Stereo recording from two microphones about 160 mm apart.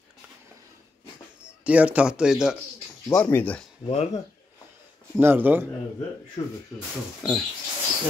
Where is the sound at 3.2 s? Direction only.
10° left (ahead or behind).